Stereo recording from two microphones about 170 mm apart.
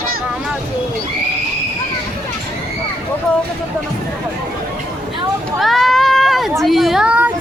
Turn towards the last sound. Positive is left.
turn(degrees=-10)  # may be behind; listen again after turning